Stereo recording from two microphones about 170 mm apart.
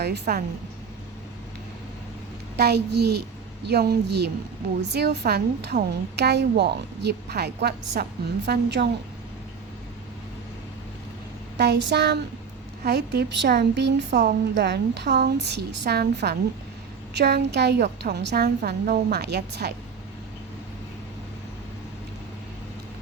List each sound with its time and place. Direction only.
0.0 s a woman's voice: 70° right (ahead or behind)
2.6 s a woman's voice: 75° right (ahead or behind)
11.5 s a woman's voice: 80° right